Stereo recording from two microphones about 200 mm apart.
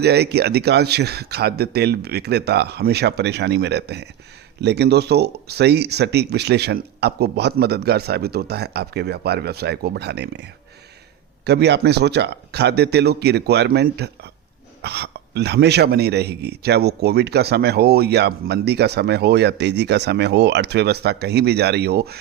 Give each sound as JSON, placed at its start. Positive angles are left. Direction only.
{"t": 0.0, "sound": "speech", "side_deg": -55}